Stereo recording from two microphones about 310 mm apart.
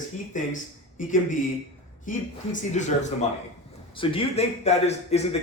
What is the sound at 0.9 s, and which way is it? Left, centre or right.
A man's voice, left.